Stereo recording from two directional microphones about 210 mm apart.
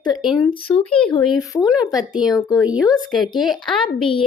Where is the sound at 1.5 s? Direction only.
15° left (ahead or behind).